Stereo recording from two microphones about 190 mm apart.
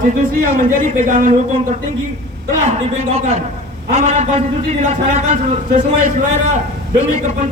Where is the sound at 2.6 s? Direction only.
35° right (ahead or behind).